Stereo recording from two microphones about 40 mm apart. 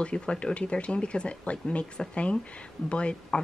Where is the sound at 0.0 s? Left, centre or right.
Left.